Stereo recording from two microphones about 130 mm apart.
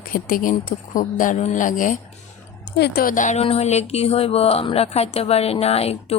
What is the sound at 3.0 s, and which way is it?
Speech, 80° left.